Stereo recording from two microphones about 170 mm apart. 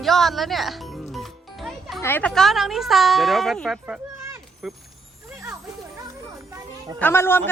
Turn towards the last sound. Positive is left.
turn(degrees=15)  # may be behind; listen again after turning